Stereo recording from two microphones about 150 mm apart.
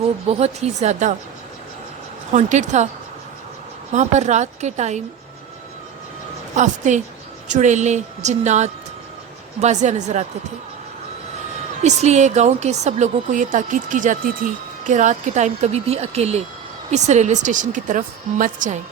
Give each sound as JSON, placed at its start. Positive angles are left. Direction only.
{"t": 0.3, "sound": "a woman's voice", "side_deg": -45}
{"t": 2.3, "sound": "a woman's voice", "side_deg": -55}
{"t": 3.9, "sound": "a woman's voice", "side_deg": -50}
{"t": 6.6, "sound": "a woman's voice", "side_deg": -55}
{"t": 11.8, "sound": "a woman's voice", "side_deg": -50}